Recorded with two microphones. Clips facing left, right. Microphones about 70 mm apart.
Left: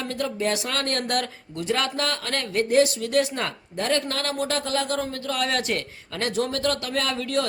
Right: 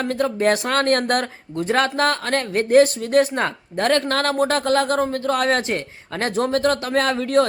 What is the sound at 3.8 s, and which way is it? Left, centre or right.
Speech, right.